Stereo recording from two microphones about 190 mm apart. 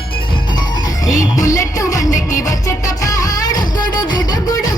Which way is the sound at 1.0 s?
20° left (ahead or behind).